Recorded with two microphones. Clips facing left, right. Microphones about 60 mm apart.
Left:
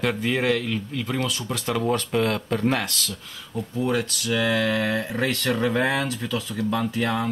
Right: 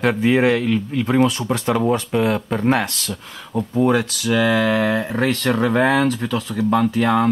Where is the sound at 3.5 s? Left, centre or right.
Right.